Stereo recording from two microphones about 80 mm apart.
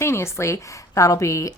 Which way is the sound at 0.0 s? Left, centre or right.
Left.